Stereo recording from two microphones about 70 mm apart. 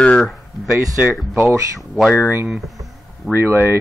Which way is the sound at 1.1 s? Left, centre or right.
Centre.